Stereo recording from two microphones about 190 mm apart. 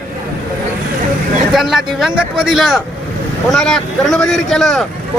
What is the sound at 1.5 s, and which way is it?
Speech, centre (ahead or behind).